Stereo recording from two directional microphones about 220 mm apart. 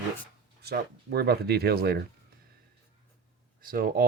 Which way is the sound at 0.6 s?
45° right (ahead or behind).